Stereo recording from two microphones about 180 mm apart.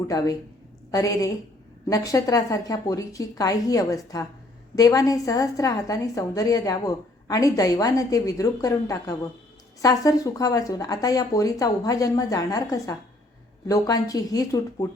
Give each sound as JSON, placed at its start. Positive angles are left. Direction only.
{"t": 0.1, "sound": "a woman's voice", "side_deg": 20}